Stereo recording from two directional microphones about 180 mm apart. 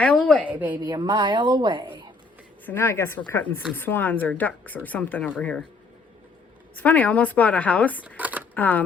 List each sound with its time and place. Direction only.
0.4 s speech: 10° right (ahead or behind)
0.8 s a woman's voice: 20° right (ahead or behind)
2.6 s speech: 10° left (ahead or behind)
6.7 s speech: 10° left (ahead or behind)
8.0 s a sound: 10° right (ahead or behind)
8.5 s speech: 10° left (ahead or behind)